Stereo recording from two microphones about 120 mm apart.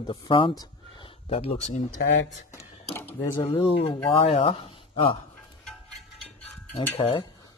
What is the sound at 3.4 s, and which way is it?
Speech, 50° left (ahead or behind).